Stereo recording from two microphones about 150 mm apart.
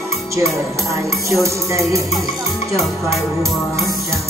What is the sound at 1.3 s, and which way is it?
Music, 20° right (ahead or behind).